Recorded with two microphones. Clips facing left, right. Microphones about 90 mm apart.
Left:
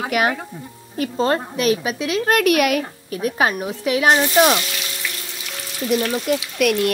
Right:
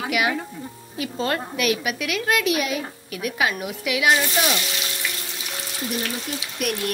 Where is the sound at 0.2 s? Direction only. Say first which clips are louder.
Left 4 dB; 40° left (ahead or behind).